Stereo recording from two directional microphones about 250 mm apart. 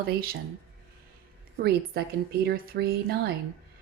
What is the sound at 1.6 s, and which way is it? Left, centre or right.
Speech, right.